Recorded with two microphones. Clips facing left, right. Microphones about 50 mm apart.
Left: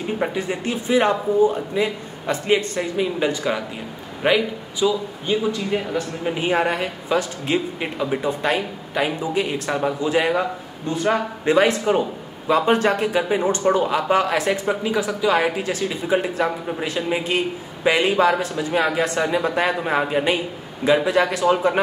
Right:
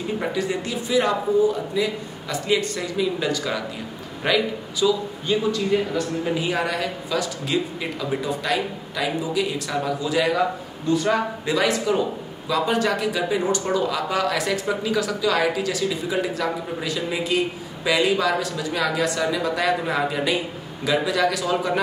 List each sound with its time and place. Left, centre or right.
0.3 s a man's voice: left
6.4 s speech: left